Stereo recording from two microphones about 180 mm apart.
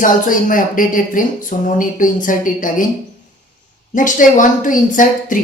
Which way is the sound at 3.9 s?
45° left (ahead or behind).